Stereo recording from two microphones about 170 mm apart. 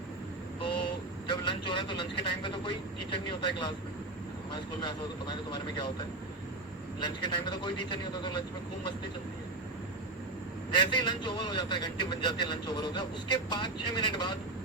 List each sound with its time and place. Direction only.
0.6 s vehicle: 30° left (ahead or behind)
1.5 s a man's voice: 30° left (ahead or behind)
7.0 s a man's voice: 25° left (ahead or behind)
10.8 s a man's voice: 25° left (ahead or behind)